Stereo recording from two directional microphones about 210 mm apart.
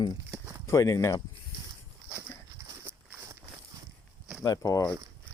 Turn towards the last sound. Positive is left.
turn(degrees=15)  # may be behind; listen again after turning